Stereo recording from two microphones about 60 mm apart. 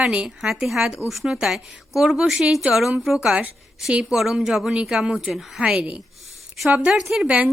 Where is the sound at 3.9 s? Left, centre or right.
Centre.